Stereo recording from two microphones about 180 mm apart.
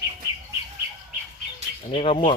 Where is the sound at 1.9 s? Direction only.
30° left (ahead or behind).